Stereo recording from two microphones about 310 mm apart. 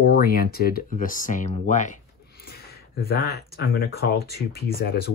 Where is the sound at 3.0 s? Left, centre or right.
Left.